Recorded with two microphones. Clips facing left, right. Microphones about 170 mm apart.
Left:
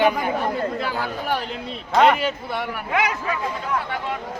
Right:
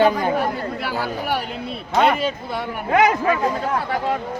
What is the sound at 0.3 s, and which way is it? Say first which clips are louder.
Speech: even; 5° right (ahead or behind).